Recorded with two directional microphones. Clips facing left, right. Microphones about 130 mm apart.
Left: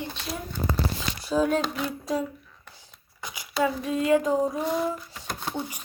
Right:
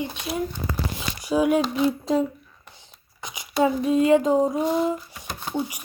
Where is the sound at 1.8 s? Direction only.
25° right (ahead or behind).